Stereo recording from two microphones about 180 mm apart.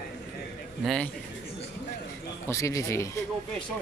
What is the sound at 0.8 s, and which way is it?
Speech, centre (ahead or behind).